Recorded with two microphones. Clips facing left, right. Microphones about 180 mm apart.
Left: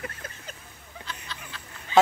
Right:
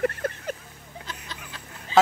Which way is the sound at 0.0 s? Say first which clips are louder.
Right 13 dB; 60° right (ahead or behind).